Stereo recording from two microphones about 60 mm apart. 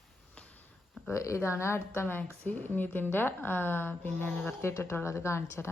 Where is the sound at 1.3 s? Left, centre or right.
Left.